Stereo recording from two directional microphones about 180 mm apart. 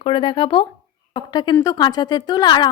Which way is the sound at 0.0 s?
25° left (ahead or behind).